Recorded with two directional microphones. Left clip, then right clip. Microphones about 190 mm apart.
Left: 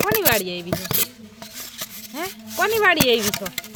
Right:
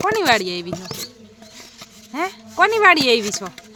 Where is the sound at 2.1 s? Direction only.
20° right (ahead or behind).